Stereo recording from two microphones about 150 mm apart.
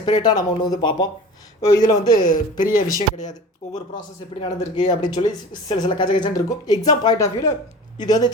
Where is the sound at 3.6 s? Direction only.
50° left (ahead or behind).